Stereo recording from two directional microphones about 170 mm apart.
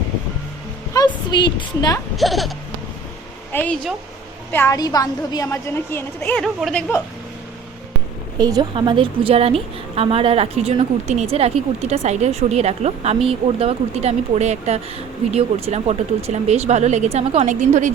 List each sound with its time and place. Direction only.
0.9 s a woman's voice: 25° left (ahead or behind)
2.1 s speech: centre (ahead or behind)
3.5 s a woman's voice: 10° left (ahead or behind)
6.4 s speech: centre (ahead or behind)
8.4 s a woman's voice: 25° right (ahead or behind); by 17.9 s 45° right (ahead or behind)